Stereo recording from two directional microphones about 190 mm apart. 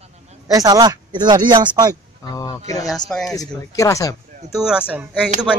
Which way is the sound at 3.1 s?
Centre (ahead or behind).